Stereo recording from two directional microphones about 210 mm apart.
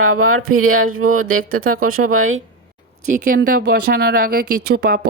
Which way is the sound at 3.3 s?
50° right (ahead or behind).